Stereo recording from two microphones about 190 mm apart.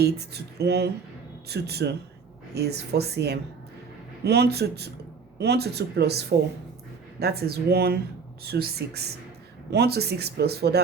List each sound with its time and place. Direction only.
0.0 s speech: 60° right (ahead or behind)